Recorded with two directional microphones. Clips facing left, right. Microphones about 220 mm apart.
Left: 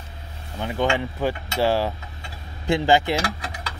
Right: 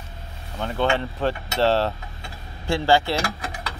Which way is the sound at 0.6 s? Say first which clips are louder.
Even; 15° left (ahead or behind).